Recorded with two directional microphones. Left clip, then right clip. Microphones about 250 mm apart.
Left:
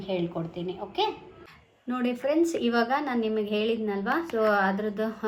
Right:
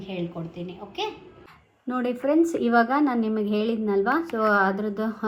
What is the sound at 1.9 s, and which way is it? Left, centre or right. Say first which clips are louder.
A woman's voice: right 3 dB; right.